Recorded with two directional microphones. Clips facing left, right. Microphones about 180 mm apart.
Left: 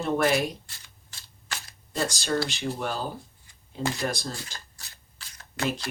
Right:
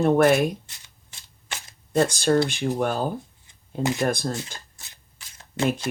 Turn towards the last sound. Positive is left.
turn(degrees=-20)  # may be behind; listen again after turning